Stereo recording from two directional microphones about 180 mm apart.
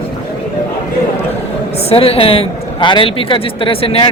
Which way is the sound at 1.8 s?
35° left (ahead or behind).